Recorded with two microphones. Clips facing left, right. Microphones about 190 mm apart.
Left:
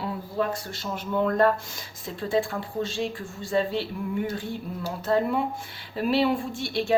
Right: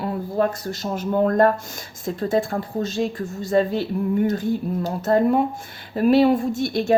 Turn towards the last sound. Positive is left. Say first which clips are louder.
# right 5 dB
turn(degrees=-45)  # may be behind; listen again after turning